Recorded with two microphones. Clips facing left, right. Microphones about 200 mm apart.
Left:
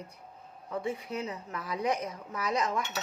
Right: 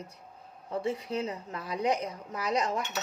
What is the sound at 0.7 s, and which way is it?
A woman's voice, 30° right (ahead or behind).